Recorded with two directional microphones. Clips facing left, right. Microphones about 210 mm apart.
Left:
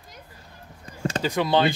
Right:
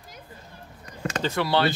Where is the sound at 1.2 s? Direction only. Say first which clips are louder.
Left 2 dB; 15° left (ahead or behind).